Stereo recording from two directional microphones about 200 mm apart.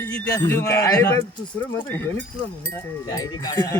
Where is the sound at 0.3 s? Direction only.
15° left (ahead or behind).